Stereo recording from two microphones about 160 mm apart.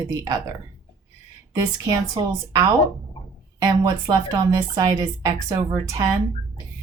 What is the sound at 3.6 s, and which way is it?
Speech, 20° right (ahead or behind).